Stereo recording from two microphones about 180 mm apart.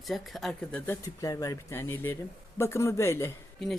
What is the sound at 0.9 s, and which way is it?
Speech, 20° left (ahead or behind).